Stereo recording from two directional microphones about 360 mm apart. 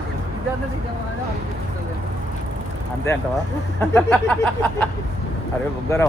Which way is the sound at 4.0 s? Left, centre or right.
Centre.